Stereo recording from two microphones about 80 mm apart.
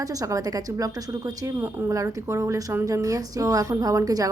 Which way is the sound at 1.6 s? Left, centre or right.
Right.